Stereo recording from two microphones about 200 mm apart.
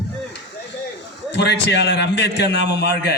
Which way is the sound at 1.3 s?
60° left (ahead or behind).